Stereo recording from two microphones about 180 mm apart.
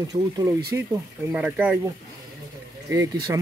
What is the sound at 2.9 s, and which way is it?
Speech, 15° right (ahead or behind).